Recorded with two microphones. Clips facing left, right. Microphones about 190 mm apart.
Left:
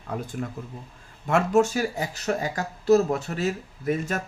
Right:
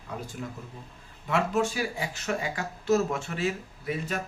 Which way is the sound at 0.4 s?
55° left (ahead or behind).